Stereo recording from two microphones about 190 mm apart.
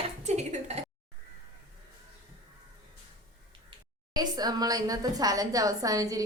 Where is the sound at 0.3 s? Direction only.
35° right (ahead or behind).